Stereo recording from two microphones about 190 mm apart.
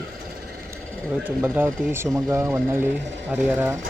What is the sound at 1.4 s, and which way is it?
Speech, 10° right (ahead or behind).